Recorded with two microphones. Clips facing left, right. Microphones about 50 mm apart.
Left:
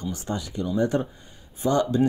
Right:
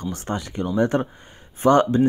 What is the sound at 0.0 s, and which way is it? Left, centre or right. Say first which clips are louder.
Speech: right 2 dB; right.